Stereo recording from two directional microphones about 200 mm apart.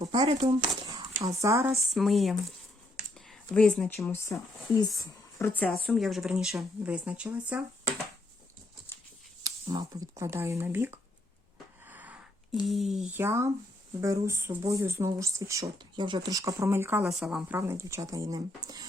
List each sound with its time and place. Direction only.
0.0 s speech: 20° right (ahead or behind)
1.7 s speech: centre (ahead or behind)
9.4 s speech: 20° right (ahead or behind)
11.9 s a sound: 10° right (ahead or behind)
12.6 s speech: centre (ahead or behind); by 18.9 s 20° right (ahead or behind)